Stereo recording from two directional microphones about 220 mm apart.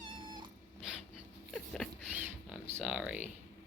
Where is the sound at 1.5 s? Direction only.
5° left (ahead or behind).